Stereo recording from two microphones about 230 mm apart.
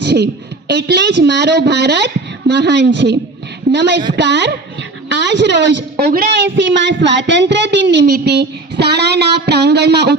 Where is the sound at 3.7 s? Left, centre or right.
Right.